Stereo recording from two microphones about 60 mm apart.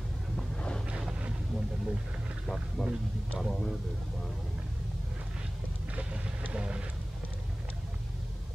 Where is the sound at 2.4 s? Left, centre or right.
Centre.